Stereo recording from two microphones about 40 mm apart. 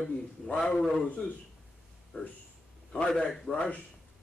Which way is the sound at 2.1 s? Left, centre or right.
Left.